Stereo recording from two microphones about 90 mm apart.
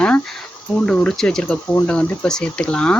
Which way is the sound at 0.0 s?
10° left (ahead or behind).